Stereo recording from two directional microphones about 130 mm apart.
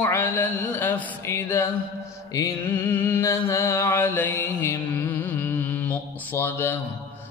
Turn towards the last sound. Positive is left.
turn(degrees=15)  # may be behind; listen again after turning